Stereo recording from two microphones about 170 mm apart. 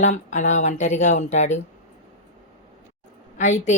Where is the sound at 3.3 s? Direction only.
45° left (ahead or behind).